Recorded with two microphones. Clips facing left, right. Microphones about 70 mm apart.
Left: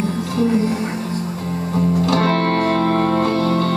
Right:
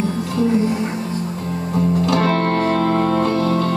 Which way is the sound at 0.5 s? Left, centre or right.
Centre.